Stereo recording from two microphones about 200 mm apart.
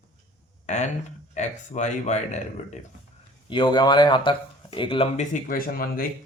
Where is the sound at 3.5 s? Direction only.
25° left (ahead or behind).